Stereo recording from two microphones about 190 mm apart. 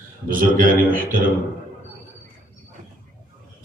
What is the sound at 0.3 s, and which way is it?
Speech, 45° right (ahead or behind).